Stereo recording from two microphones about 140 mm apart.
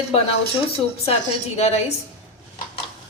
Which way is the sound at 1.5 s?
50° left (ahead or behind).